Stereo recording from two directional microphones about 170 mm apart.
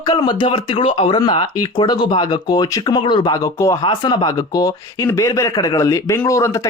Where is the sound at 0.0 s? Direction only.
25° left (ahead or behind).